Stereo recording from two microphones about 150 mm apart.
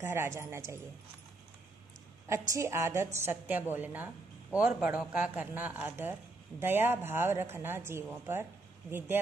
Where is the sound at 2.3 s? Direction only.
20° right (ahead or behind).